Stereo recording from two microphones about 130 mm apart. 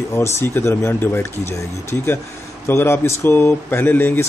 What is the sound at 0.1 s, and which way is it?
Speech, 20° left (ahead or behind).